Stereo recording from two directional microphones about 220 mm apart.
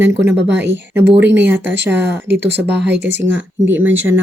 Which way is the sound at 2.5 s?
55° right (ahead or behind).